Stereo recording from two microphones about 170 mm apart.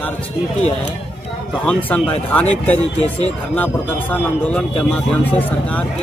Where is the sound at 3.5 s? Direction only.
10° left (ahead or behind).